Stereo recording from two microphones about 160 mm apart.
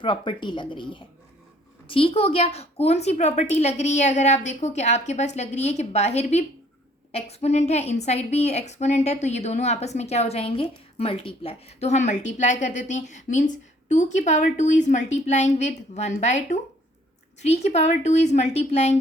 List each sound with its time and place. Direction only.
0.0 s a woman's voice: 30° left (ahead or behind)